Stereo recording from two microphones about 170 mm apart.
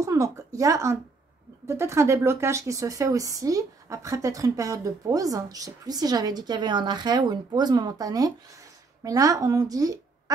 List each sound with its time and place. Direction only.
0.0 s a woman's voice: 20° right (ahead or behind)